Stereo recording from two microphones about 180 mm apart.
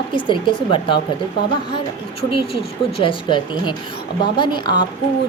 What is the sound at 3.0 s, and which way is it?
A woman's voice, 25° left (ahead or behind).